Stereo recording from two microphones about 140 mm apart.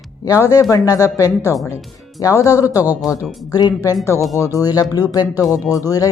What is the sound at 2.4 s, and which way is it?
Speech, 25° left (ahead or behind).